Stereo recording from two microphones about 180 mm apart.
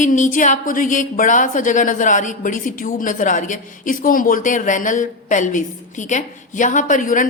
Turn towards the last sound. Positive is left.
turn(degrees=45)  # may be behind; listen again after turning